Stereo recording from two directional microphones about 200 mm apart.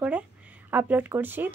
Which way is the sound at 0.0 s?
5° right (ahead or behind).